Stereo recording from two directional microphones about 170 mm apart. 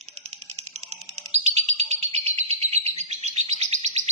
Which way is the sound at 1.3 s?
40° right (ahead or behind).